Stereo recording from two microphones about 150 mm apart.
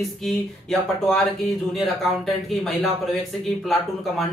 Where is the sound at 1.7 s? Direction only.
Centre (ahead or behind).